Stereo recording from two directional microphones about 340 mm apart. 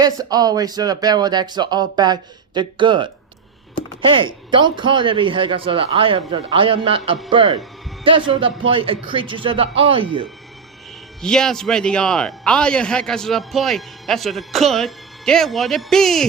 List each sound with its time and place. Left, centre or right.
0.0 s speech: centre
11.2 s a man's voice: centre